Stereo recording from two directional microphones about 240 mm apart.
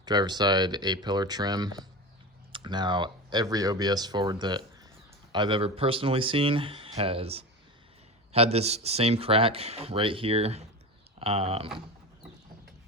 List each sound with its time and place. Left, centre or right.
0.0 s speech: centre